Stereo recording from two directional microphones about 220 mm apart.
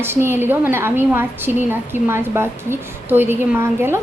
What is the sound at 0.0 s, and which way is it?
A woman's voice, 10° right (ahead or behind).